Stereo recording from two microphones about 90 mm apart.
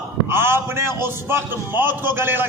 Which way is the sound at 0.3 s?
25° right (ahead or behind).